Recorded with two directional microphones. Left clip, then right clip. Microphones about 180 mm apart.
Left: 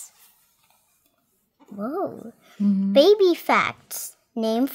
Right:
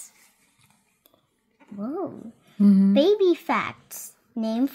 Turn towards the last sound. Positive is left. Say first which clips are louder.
# left 3 dB
turn(degrees=25)  # may be behind; listen again after turning